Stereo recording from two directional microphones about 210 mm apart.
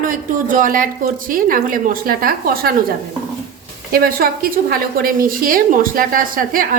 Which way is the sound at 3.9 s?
45° right (ahead or behind).